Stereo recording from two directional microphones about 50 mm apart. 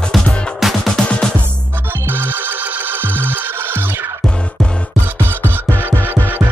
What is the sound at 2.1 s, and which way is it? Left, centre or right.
Music, right.